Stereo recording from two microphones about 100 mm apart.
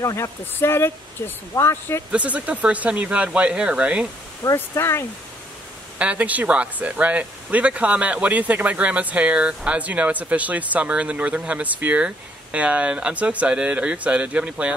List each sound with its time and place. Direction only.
0.0 s speech: 30° left (ahead or behind)
2.1 s speech: 15° right (ahead or behind)
4.6 s speech: 25° left (ahead or behind)
5.9 s speech: 15° right (ahead or behind)